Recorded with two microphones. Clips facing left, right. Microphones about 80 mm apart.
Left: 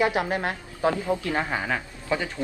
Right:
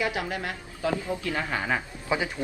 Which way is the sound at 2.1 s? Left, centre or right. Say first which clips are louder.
Even; centre.